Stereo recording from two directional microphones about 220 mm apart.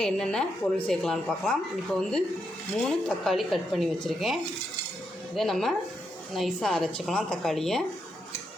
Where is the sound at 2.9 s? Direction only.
Centre (ahead or behind).